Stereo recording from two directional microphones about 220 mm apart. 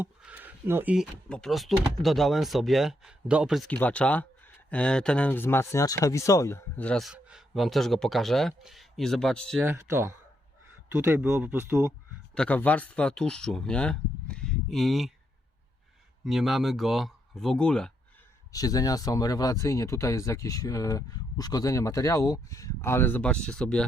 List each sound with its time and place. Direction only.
0.0 s a sound: 5° right (ahead or behind)
1.3 s speech: centre (ahead or behind)
9.6 s speech: 10° right (ahead or behind)
12.3 s speech: 5° left (ahead or behind)
16.2 s speech: centre (ahead or behind)
18.5 s speech: 15° left (ahead or behind)